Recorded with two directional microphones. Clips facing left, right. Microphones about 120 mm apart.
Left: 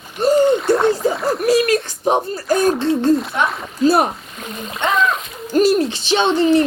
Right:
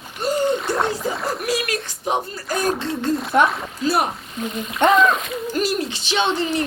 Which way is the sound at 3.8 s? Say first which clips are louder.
Left 6 dB; 35° left (ahead or behind).